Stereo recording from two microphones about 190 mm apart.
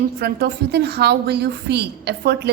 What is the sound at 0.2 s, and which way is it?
A woman's voice, 60° right (ahead or behind).